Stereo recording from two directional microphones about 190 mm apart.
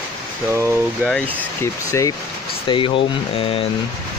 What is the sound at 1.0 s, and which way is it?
Speech, 5° left (ahead or behind).